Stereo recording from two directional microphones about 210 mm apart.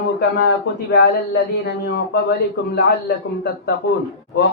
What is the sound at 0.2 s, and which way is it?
Speech, 50° left (ahead or behind).